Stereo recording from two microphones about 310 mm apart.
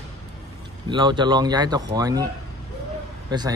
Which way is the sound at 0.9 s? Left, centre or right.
Centre.